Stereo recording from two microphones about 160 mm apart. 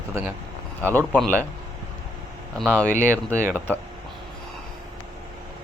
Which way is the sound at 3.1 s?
15° right (ahead or behind).